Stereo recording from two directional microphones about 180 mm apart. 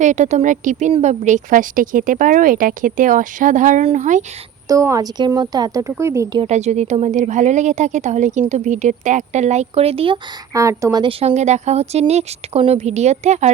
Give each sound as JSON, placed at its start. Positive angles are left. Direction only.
{"t": 0.0, "sound": "speech", "side_deg": -40}
{"t": 4.7, "sound": "speech", "side_deg": -20}
{"t": 6.4, "sound": "a woman's voice", "side_deg": -40}
{"t": 10.5, "sound": "speech", "side_deg": -20}
{"t": 11.2, "sound": "a woman's voice", "side_deg": -35}